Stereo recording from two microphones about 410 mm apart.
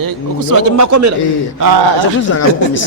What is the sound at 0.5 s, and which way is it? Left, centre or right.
Speech, right.